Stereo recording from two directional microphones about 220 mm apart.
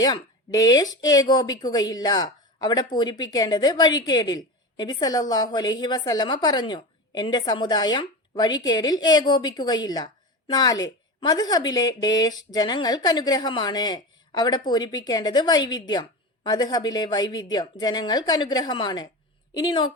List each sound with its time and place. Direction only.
0.0 s a woman's voice: 15° left (ahead or behind)